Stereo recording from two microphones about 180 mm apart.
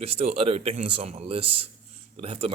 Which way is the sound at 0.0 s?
35° right (ahead or behind).